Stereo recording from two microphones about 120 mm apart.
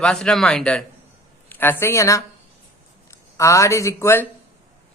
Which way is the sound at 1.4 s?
15° left (ahead or behind).